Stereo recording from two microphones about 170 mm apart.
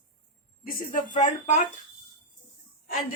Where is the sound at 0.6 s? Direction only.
55° left (ahead or behind).